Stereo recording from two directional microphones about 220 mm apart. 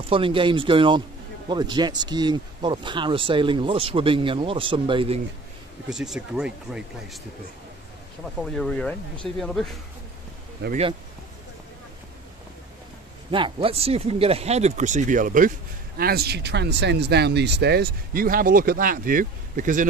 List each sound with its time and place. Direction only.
0.1 s speech: 25° right (ahead or behind)
5.9 s speech: centre (ahead or behind)
8.4 s speech: centre (ahead or behind)
13.3 s speech: 25° right (ahead or behind)